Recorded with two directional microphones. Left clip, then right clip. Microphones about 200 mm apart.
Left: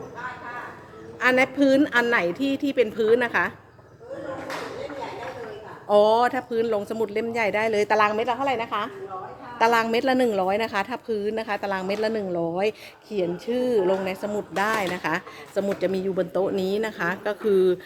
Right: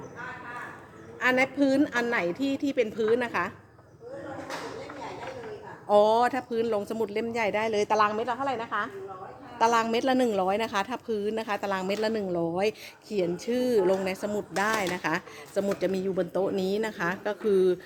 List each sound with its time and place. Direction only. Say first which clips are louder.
1.2 s a woman's voice: left 4 dB; centre (ahead or behind)
5.9 s a woman's voice: left 3 dB; 10° right (ahead or behind)